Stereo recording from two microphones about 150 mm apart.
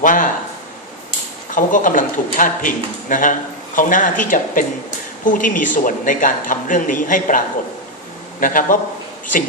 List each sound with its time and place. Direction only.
0.0 s speech: 60° left (ahead or behind)
1.5 s speech: 60° left (ahead or behind)